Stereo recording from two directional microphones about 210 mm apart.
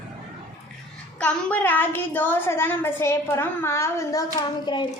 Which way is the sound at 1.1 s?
5° left (ahead or behind).